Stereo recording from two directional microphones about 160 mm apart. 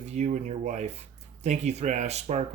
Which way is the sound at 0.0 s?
45° right (ahead or behind).